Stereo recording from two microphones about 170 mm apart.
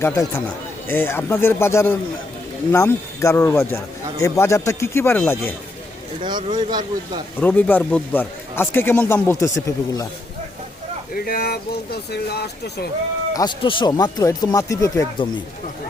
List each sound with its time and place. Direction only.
0.0 s a man's voice: 15° left (ahead or behind)
6.2 s speech: 25° right (ahead or behind)
7.3 s a man's voice: 10° left (ahead or behind)
11.1 s speech: 60° left (ahead or behind)
13.3 s speech: 25° left (ahead or behind)